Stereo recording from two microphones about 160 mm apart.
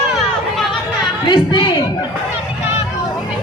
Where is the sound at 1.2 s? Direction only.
30° left (ahead or behind).